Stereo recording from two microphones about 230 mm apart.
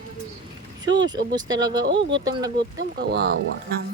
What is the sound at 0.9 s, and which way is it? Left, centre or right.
Speech, centre.